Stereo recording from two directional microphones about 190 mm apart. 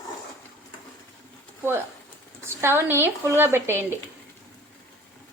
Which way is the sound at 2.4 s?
10° right (ahead or behind).